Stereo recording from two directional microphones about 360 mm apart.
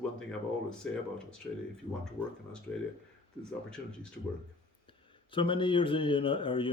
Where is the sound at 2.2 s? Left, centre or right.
Centre.